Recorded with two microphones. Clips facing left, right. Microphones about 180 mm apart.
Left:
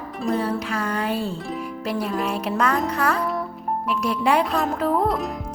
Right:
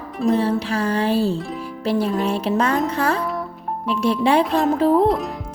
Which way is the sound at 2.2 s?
30° right (ahead or behind).